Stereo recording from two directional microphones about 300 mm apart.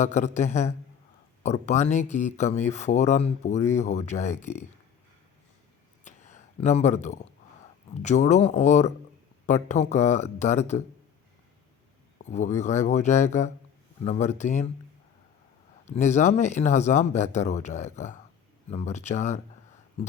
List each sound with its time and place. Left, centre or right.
0.0 s speech: left
6.1 s a sound: left
7.9 s speech: left
12.2 s speech: left
15.9 s speech: left